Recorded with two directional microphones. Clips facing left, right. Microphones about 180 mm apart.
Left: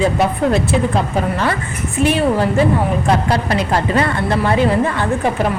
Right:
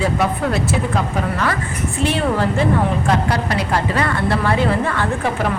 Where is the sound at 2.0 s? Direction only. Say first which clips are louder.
Left 4 dB; 15° left (ahead or behind).